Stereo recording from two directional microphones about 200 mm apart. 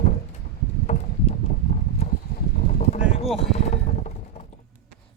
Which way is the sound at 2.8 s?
35° left (ahead or behind).